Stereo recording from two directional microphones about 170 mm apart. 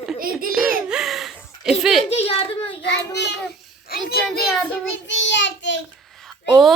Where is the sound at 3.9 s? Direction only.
65° left (ahead or behind).